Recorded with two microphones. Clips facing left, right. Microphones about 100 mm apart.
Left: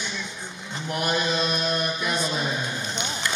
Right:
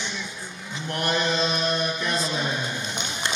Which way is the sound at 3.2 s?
25° right (ahead or behind).